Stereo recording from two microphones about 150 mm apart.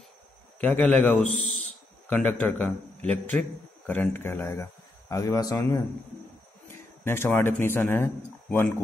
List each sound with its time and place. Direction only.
0.6 s a man's voice: 10° left (ahead or behind)
1.2 s a man's voice: 55° left (ahead or behind)
2.0 s a man's voice: 10° left (ahead or behind)
6.7 s a sound: 15° left (ahead or behind)
7.6 s a man's voice: 15° left (ahead or behind)